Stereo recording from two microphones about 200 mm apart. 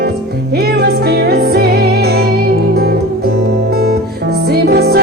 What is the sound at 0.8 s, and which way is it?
Music, 50° right (ahead or behind).